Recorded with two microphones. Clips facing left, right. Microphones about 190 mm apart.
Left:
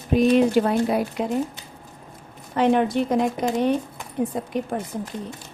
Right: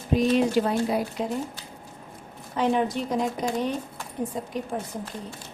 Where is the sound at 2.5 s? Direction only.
65° left (ahead or behind).